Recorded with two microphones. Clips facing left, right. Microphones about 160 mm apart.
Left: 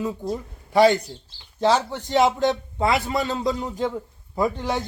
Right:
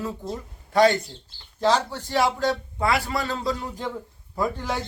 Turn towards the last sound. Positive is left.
turn(degrees=20)  # may be behind; listen again after turning